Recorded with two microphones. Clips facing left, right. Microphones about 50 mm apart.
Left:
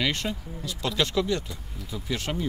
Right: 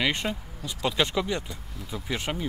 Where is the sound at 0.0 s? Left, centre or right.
Centre.